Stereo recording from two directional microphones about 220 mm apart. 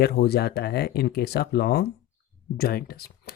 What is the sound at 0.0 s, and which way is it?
Speech, 45° left (ahead or behind).